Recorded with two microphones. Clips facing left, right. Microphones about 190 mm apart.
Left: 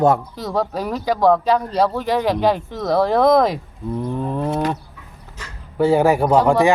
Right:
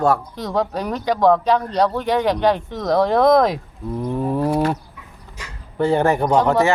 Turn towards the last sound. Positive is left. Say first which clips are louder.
# left 2 dB
turn(degrees=10)  # may be behind; listen again after turning